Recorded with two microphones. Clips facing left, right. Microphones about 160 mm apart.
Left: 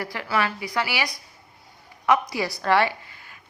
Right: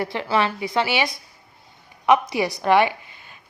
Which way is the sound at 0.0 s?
25° right (ahead or behind).